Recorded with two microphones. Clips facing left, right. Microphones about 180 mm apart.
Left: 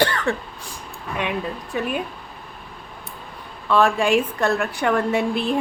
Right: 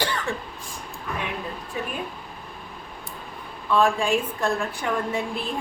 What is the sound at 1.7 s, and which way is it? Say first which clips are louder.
Speech: left 6 dB; 70° left (ahead or behind).